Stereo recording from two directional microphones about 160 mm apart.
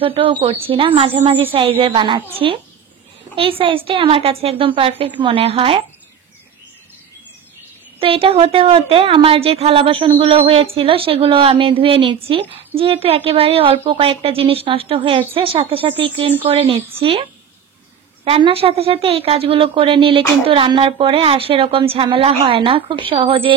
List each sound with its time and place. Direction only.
0.0 s a woman's voice: 35° right (ahead or behind)
8.0 s a woman's voice: 35° right (ahead or behind)